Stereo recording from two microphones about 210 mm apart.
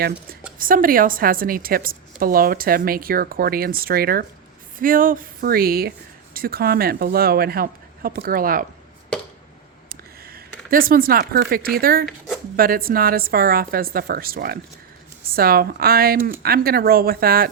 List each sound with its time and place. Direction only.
0.6 s a woman's voice: 40° right (ahead or behind)
9.9 s a woman's voice: 45° right (ahead or behind)